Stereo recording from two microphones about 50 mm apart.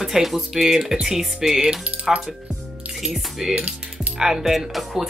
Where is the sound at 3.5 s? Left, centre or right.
Right.